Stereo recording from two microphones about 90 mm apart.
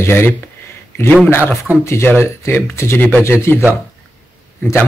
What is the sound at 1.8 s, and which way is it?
Speech, 30° left (ahead or behind).